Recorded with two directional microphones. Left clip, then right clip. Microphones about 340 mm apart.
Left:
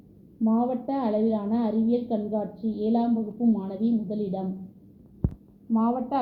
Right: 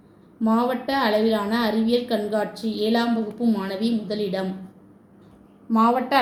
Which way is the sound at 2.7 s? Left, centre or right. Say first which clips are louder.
Right 3 dB; centre.